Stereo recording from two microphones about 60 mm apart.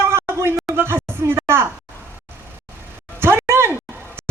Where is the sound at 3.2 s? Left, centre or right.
Right.